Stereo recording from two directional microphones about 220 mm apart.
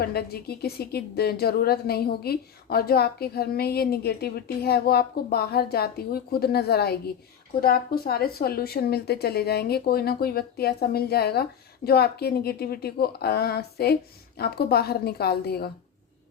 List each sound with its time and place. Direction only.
0.0 s a woman's voice: 45° left (ahead or behind)